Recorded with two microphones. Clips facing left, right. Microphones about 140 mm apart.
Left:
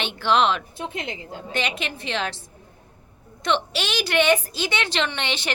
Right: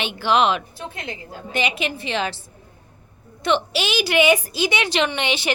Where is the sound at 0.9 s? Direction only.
20° left (ahead or behind).